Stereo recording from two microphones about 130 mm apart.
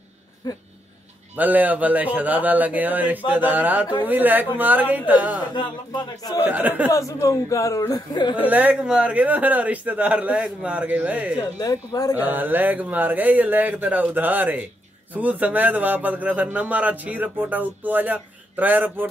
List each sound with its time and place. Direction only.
0.4 s a man's voice: 30° left (ahead or behind)
1.3 s a man's voice: 15° right (ahead or behind)
5.5 s a man's voice: 35° left (ahead or behind)
6.4 s a man's voice: 15° right (ahead or behind)
6.9 s speech: 25° left (ahead or behind)
8.4 s a man's voice: 10° right (ahead or behind)
11.3 s speech: 30° left (ahead or behind)
12.3 s a man's voice: 15° right (ahead or behind)